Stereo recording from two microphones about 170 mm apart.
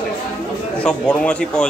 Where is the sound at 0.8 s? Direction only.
5° left (ahead or behind).